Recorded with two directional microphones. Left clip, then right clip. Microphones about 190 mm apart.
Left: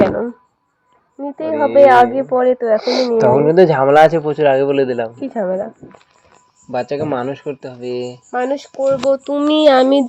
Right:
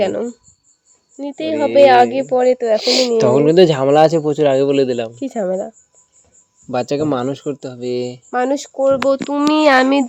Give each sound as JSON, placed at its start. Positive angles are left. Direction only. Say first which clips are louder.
{"t": 0.1, "sound": "a woman's voice", "louder": "left 1 dB", "side_deg": -45}
{"t": 1.5, "sound": "a woman's voice", "louder": "left 1 dB", "side_deg": -65}
{"t": 6.7, "sound": "speech", "louder": "right 1 dB", "side_deg": -70}
{"t": 9.4, "sound": "speech", "louder": "right 1 dB", "side_deg": -35}
{"t": 9.6, "sound": "speech", "louder": "left 3 dB", "side_deg": -10}